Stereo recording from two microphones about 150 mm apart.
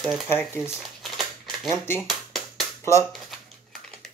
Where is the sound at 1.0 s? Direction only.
Centre (ahead or behind).